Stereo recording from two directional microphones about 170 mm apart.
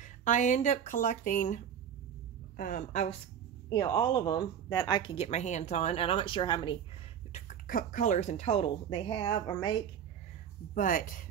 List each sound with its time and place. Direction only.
0.0 s speech: 45° left (ahead or behind)
3.8 s speech: 20° left (ahead or behind)
7.3 s speech: 50° left (ahead or behind); by 9.8 s 20° left (ahead or behind)
10.7 s speech: 50° left (ahead or behind)